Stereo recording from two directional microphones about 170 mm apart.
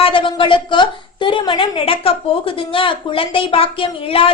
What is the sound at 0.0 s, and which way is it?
A woman's voice, 30° left (ahead or behind).